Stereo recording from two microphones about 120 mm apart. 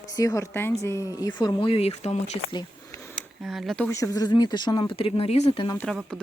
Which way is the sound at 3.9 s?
25° left (ahead or behind).